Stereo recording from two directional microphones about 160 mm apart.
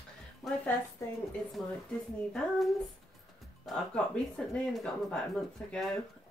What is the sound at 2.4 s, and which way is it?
Speech, 5° left (ahead or behind).